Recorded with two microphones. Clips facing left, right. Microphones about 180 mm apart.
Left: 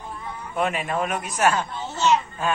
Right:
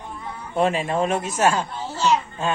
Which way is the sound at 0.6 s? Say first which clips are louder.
Right 4 dB; 30° right (ahead or behind).